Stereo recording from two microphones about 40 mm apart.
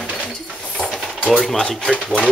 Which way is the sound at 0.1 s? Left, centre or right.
Left.